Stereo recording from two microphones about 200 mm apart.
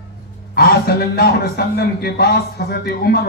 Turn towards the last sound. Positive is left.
turn(degrees=50)  # may be behind; listen again after turning